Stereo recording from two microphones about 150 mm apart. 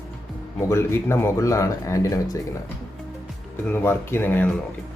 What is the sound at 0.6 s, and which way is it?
Speech, 20° left (ahead or behind).